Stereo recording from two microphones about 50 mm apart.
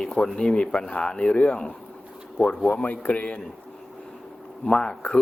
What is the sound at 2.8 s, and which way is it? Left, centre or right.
Speech, left.